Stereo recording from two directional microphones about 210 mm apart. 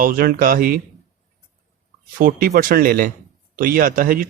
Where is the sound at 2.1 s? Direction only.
40° right (ahead or behind).